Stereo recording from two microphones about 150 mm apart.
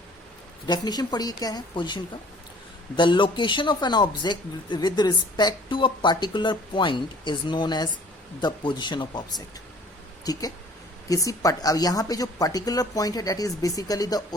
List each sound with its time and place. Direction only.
0.7 s speech: 25° left (ahead or behind)
10.3 s speech: 25° left (ahead or behind)